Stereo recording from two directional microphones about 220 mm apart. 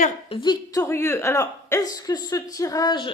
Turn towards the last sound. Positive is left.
turn(degrees=20)  # may be behind; listen again after turning